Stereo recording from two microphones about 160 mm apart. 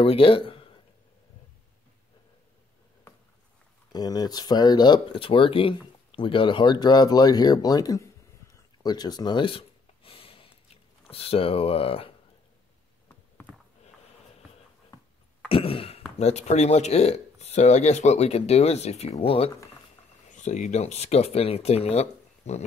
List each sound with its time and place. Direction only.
0.0 s speech: 35° left (ahead or behind)
3.9 s speech: 25° left (ahead or behind)
8.8 s a sound: 25° left (ahead or behind)
11.1 s speech: 35° left (ahead or behind)
15.4 s cough: 35° left (ahead or behind)
16.2 s speech: 45° left (ahead or behind)
20.3 s speech: 50° left (ahead or behind)